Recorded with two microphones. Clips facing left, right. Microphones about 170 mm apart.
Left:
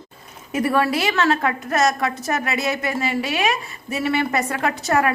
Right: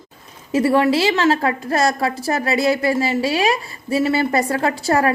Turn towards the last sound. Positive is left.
turn(degrees=-30)  # may be behind; listen again after turning